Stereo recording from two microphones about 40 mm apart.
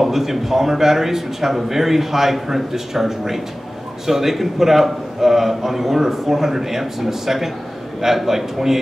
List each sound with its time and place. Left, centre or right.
0.0 s a man's voice: centre